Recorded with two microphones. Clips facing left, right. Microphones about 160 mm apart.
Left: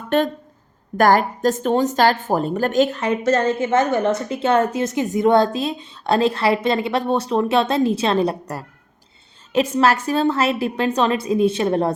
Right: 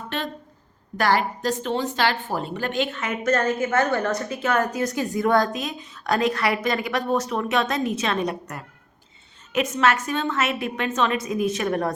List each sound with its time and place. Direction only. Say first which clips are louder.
0.1 s a woman's voice: left 12 dB; 50° left (ahead or behind); by 11.9 s 30° left (ahead or behind)